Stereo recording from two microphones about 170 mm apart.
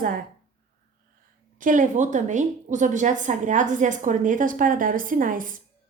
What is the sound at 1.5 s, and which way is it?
A woman's voice, 50° right (ahead or behind).